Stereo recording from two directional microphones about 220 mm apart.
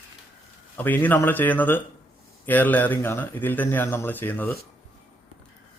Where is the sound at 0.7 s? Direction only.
10° left (ahead or behind).